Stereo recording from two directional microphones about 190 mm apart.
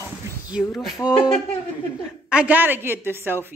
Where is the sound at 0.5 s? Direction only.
Centre (ahead or behind).